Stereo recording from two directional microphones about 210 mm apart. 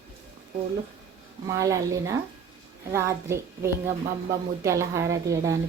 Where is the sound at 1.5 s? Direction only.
15° right (ahead or behind).